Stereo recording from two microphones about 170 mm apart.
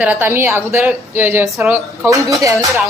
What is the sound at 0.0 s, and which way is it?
A woman's voice, 10° right (ahead or behind).